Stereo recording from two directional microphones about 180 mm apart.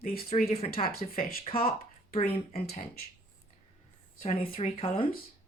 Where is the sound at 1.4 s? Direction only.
30° left (ahead or behind).